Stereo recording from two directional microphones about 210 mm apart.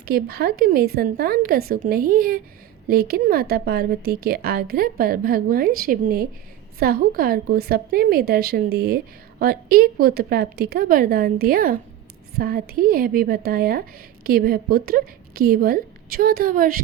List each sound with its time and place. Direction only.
0.0 s a woman's voice: 45° right (ahead or behind)